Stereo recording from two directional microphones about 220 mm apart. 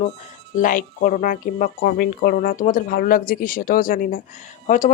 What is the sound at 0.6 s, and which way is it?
Speech, 40° left (ahead or behind).